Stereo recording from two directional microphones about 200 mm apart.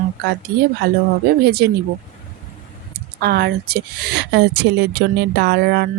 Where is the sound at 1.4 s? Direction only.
55° right (ahead or behind).